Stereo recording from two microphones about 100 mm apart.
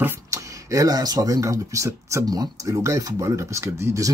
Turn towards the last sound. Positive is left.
turn(degrees=-30)  # may be behind; listen again after turning